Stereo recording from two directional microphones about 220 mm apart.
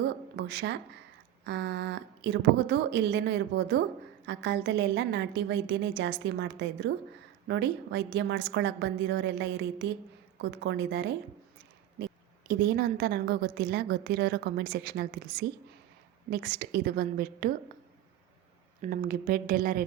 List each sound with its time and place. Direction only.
0.3 s a woman's voice: 50° right (ahead or behind)
12.5 s a woman's voice: 45° right (ahead or behind)
18.8 s speech: 40° right (ahead or behind)